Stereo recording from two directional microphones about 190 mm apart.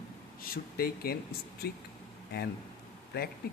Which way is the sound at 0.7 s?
55° left (ahead or behind).